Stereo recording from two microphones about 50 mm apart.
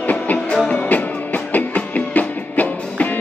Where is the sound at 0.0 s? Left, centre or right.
Left.